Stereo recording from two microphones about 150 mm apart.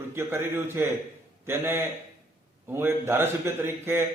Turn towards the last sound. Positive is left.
turn(degrees=-15)  # may be behind; listen again after turning